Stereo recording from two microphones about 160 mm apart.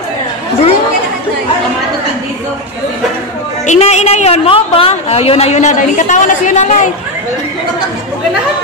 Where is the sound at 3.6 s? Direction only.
45° left (ahead or behind).